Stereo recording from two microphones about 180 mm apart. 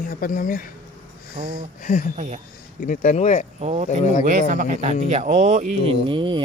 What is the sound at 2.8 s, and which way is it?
Speech, 45° left (ahead or behind).